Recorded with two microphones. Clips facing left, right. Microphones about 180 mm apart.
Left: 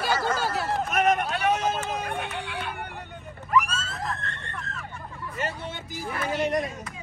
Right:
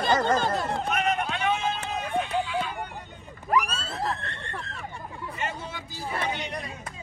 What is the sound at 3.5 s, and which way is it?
Screaming, 35° right (ahead or behind).